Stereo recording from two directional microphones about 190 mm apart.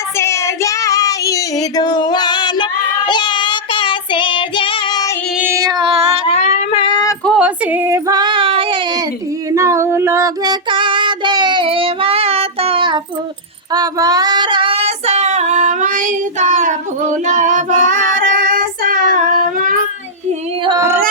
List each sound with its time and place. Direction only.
0.2 s child singing: 15° left (ahead or behind)
5.4 s child singing: 15° right (ahead or behind); by 6.2 s 30° right (ahead or behind)
6.2 s a sound: 35° left (ahead or behind)
7.3 s female singing: 5° right (ahead or behind); by 9.0 s 25° right (ahead or behind)
9.5 s female singing: 15° right (ahead or behind); by 16.7 s 40° right (ahead or behind)
17.2 s child singing: 40° right (ahead or behind)